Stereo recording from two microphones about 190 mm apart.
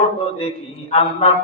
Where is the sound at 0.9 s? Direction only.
30° left (ahead or behind).